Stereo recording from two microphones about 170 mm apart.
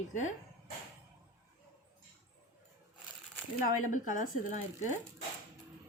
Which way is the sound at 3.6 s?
50° left (ahead or behind).